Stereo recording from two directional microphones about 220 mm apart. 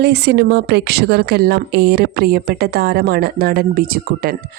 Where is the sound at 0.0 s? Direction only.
50° right (ahead or behind).